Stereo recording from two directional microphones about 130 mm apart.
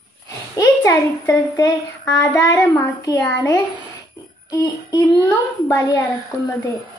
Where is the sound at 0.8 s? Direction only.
20° left (ahead or behind).